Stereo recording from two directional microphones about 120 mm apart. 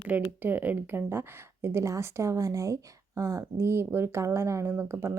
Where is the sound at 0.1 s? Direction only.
15° right (ahead or behind).